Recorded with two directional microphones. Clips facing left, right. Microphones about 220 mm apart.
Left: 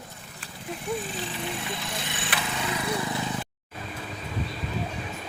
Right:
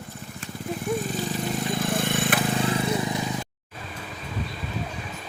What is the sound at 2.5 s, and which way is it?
Vehicle, 30° right (ahead or behind).